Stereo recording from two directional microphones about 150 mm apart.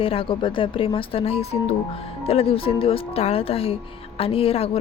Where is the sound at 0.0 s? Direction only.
40° left (ahead or behind).